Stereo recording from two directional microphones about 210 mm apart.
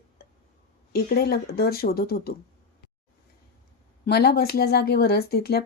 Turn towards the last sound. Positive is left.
turn(degrees=45)  # may be behind; listen again after turning